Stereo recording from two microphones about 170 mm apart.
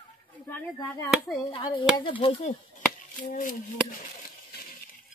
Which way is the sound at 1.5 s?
25° left (ahead or behind).